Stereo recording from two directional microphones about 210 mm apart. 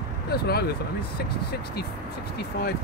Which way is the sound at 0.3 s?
50° left (ahead or behind).